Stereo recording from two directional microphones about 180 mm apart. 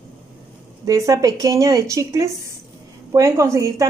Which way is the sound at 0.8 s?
20° right (ahead or behind).